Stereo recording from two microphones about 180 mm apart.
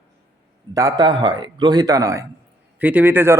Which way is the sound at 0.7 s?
20° right (ahead or behind).